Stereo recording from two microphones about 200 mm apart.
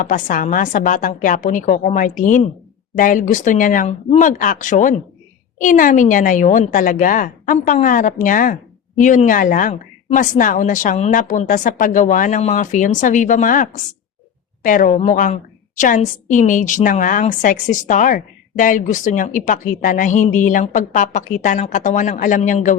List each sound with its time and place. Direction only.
0.0 s a woman's voice: 40° left (ahead or behind)